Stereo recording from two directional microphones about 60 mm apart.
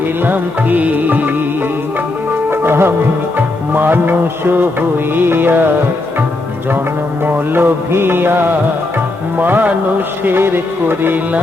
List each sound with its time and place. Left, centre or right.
0.3 s music: right
2.5 s music: right
7.3 s music: right